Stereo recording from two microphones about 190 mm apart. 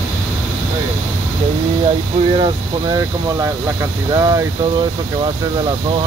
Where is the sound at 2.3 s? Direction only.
25° right (ahead or behind).